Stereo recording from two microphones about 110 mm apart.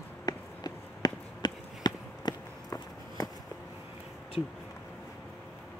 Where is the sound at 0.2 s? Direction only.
40° left (ahead or behind).